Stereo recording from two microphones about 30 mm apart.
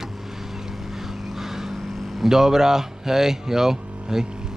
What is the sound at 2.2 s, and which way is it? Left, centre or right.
Speech, centre.